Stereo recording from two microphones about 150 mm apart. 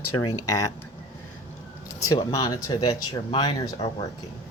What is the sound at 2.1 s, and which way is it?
Speech, 25° left (ahead or behind).